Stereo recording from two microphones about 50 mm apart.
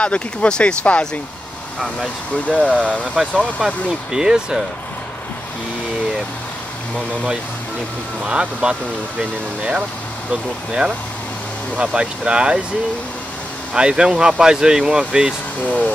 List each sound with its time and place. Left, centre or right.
0.0 s speech: left
2.4 s speech: left
2.8 s speech: right
8.2 s speech: centre
13.7 s speech: centre